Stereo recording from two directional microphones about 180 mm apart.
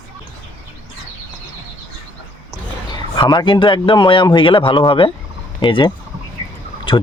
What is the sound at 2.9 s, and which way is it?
Speech, 25° left (ahead or behind).